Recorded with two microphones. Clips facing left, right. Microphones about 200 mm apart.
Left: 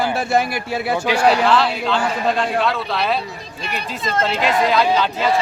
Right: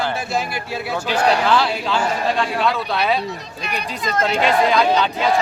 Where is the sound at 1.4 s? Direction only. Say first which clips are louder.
Left 1 dB; centre (ahead or behind).